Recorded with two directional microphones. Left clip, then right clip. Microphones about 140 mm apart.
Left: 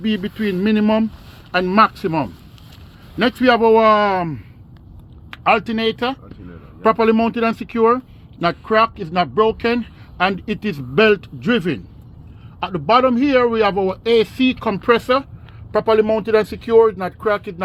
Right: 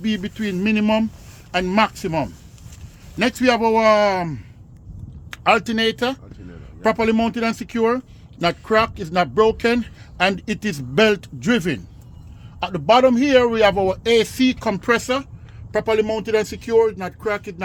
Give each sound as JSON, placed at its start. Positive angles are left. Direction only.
{"t": 0.0, "sound": "speech", "side_deg": -35}
{"t": 5.3, "sound": "speech", "side_deg": -55}
{"t": 6.8, "sound": "speech", "side_deg": -35}
{"t": 14.9, "sound": "speech", "side_deg": -30}
{"t": 15.7, "sound": "speech", "side_deg": -15}